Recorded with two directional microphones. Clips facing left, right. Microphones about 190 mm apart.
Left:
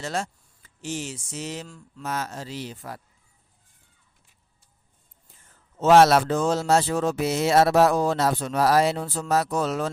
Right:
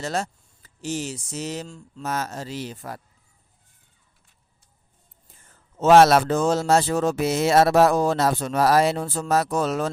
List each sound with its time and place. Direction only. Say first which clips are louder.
0.0 s speech: right 2 dB; 40° right (ahead or behind)
1.6 s speech: right 4 dB; 25° right (ahead or behind)
2.0 s speech: right 2 dB; 45° right (ahead or behind)
5.8 s speech: right 2 dB; 50° right (ahead or behind)